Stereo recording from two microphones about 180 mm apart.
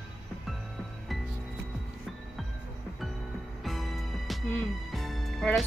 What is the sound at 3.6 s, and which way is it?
Music, centre (ahead or behind).